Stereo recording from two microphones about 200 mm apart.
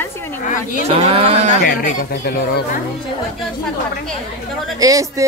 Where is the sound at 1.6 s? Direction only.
45° left (ahead or behind).